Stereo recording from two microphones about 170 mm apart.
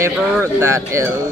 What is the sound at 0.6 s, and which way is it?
Speech, 15° right (ahead or behind).